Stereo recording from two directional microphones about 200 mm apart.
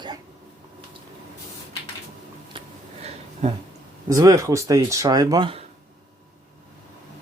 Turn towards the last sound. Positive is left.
turn(degrees=-25)  # may be behind; listen again after turning